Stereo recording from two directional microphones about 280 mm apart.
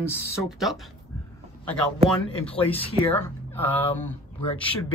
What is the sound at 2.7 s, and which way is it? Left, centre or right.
Speech, centre.